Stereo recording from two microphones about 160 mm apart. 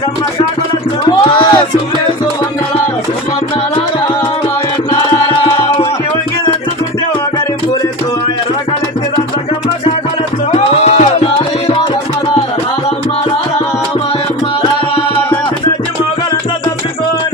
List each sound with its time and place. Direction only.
1.1 s music: 25° left (ahead or behind)
5.4 s music: 35° left (ahead or behind)
10.5 s music: 40° left (ahead or behind)